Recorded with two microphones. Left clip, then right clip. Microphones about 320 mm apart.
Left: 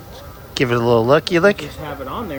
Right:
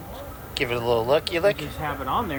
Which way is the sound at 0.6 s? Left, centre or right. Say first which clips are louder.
Left 8 dB; left.